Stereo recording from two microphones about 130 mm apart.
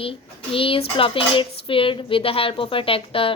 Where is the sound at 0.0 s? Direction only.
45° left (ahead or behind).